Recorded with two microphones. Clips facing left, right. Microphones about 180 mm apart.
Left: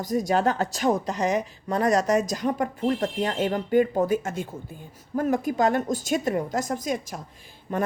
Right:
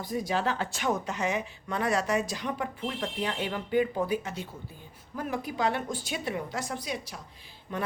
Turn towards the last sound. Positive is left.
turn(degrees=45)  # may be behind; listen again after turning